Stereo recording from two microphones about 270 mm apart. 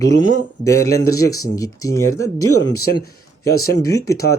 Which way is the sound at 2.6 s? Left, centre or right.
Left.